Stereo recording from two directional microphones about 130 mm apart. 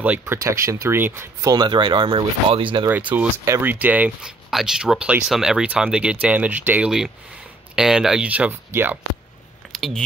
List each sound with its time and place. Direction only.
0.2 s speech: 20° right (ahead or behind)
1.5 s speech: 35° right (ahead or behind)
2.9 s speech: 10° right (ahead or behind)
3.4 s speech: 20° right (ahead or behind)
9.7 s a sound: centre (ahead or behind)